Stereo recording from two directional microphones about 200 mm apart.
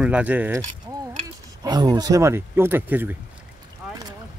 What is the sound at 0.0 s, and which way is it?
Speech, 5° right (ahead or behind).